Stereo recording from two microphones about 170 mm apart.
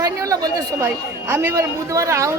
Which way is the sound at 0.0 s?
20° right (ahead or behind).